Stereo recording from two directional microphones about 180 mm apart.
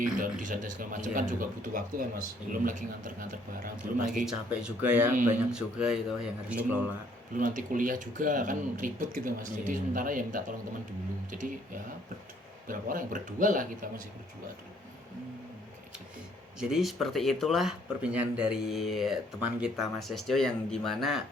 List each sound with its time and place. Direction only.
0.2 s speech: 50° right (ahead or behind)
4.6 s speech: 10° right (ahead or behind)
7.3 s speech: 45° right (ahead or behind)
12.6 s speech: 50° right (ahead or behind)
16.6 s speech: centre (ahead or behind)